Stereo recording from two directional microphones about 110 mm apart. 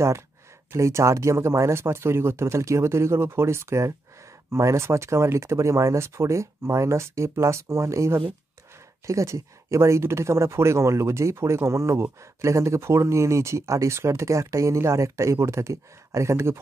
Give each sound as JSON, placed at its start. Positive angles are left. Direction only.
{"t": 0.7, "sound": "speech", "side_deg": -25}